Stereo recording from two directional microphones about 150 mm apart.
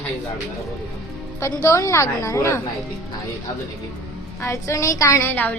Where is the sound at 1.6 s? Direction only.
20° left (ahead or behind).